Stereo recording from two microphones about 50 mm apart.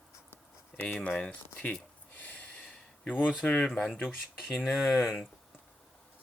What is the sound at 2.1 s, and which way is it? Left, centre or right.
Snort, left.